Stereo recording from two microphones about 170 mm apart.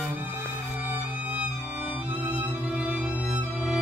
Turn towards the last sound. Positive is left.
turn(degrees=-5)  # may be behind; listen again after turning